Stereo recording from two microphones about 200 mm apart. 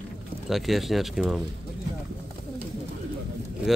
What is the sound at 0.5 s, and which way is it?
Speech, centre (ahead or behind).